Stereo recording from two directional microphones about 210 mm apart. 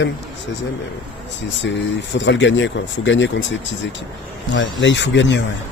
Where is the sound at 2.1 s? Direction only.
60° left (ahead or behind).